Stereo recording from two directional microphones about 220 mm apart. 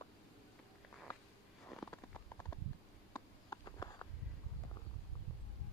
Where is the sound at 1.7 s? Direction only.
5° left (ahead or behind).